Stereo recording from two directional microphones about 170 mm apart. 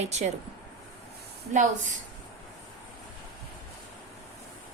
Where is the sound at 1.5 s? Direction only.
50° right (ahead or behind).